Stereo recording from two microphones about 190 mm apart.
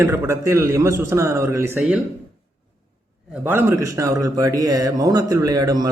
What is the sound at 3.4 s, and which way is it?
A man's voice, 15° right (ahead or behind).